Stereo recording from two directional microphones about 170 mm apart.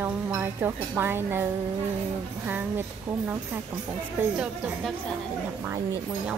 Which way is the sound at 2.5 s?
10° right (ahead or behind).